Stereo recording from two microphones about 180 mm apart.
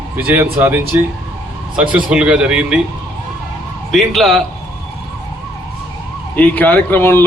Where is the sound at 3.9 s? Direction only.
Centre (ahead or behind).